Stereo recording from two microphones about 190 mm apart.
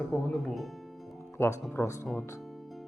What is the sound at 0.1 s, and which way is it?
Speech, centre (ahead or behind).